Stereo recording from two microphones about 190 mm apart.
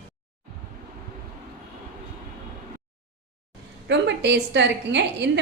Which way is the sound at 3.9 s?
65° right (ahead or behind).